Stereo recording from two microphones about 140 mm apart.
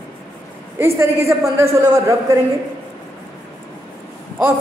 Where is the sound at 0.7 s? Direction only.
20° right (ahead or behind).